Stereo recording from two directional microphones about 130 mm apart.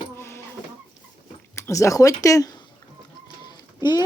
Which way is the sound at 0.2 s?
20° left (ahead or behind).